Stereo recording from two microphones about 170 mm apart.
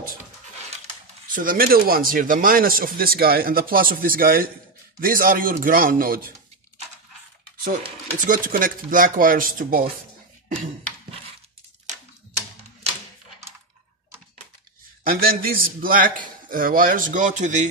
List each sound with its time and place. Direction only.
1.3 s speech: 55° right (ahead or behind)
8.3 s speech: 55° right (ahead or behind)
10.5 s a sound: 40° right (ahead or behind)
15.0 s speech: 60° right (ahead or behind)